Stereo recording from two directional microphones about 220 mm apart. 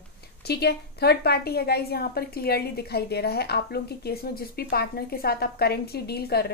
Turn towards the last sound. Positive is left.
turn(degrees=45)  # may be behind; listen again after turning